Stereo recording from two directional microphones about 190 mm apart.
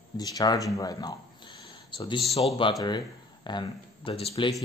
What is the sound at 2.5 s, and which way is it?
Speech, 25° left (ahead or behind).